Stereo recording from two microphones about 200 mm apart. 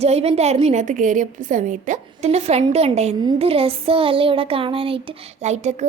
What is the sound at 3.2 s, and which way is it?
Child singing, 30° right (ahead or behind).